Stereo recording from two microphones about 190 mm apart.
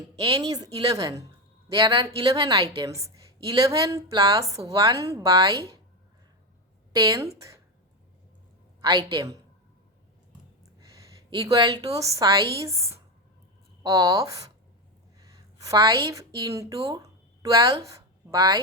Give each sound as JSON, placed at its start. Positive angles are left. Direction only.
{"t": 0.3, "sound": "a woman's voice", "side_deg": -20}
{"t": 6.9, "sound": "a woman's voice", "side_deg": -15}
{"t": 8.8, "sound": "a woman's voice", "side_deg": -25}
{"t": 11.3, "sound": "a woman's voice", "side_deg": -20}